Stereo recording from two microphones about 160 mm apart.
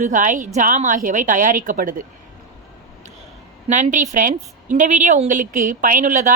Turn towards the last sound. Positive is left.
turn(degrees=-55)  # may be behind; listen again after turning